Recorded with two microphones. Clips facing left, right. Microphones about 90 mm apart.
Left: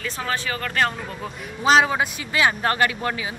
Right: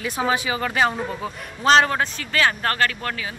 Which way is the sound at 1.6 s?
5° left (ahead or behind).